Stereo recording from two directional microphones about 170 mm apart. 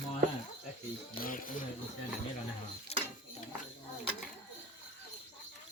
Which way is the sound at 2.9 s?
35° left (ahead or behind).